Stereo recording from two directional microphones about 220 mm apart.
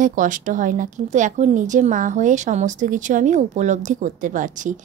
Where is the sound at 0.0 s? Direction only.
35° right (ahead or behind).